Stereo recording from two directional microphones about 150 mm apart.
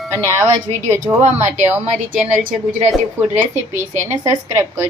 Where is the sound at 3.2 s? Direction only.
15° right (ahead or behind).